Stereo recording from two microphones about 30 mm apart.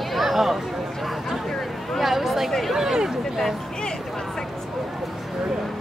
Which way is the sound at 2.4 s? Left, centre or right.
Centre.